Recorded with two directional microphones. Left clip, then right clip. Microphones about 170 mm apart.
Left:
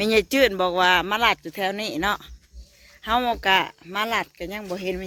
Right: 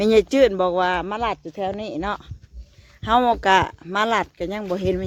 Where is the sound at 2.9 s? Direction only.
15° right (ahead or behind).